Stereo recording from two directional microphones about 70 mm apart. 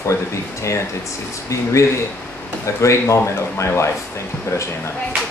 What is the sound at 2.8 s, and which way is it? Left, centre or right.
Speech, left.